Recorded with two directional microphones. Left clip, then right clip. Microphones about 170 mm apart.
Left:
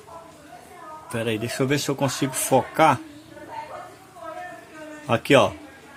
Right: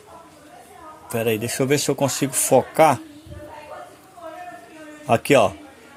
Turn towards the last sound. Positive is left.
turn(degrees=-25)  # may be behind; listen again after turning